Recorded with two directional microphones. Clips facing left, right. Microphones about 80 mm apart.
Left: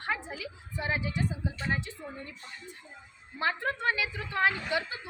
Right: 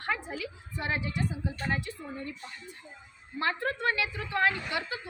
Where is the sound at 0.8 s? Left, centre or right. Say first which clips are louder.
Even; centre.